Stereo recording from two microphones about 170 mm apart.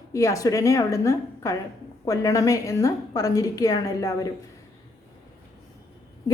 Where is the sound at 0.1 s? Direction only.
20° left (ahead or behind).